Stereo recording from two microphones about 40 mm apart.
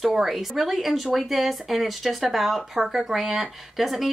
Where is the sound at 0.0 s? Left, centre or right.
Centre.